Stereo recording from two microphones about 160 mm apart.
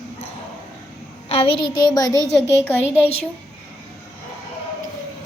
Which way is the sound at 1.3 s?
35° left (ahead or behind).